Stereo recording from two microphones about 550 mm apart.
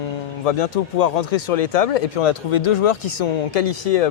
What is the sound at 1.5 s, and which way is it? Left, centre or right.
Speech, left.